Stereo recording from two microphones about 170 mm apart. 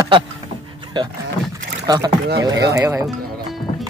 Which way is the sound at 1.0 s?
25° right (ahead or behind).